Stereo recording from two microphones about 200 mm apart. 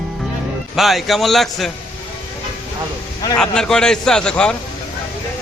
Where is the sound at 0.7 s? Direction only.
Centre (ahead or behind).